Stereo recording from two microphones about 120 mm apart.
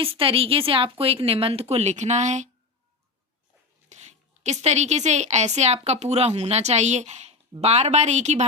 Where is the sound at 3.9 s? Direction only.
75° right (ahead or behind).